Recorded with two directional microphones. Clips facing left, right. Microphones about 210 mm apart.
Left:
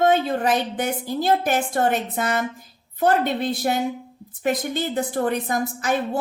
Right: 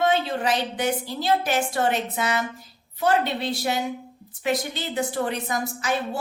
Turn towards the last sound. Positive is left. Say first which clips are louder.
# left 3 dB
turn(degrees=50)  # may be behind; listen again after turning